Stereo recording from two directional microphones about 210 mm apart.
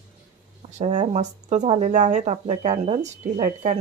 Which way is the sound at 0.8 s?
35° right (ahead or behind).